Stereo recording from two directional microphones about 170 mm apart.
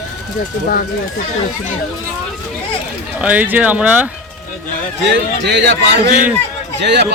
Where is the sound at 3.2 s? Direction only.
10° right (ahead or behind).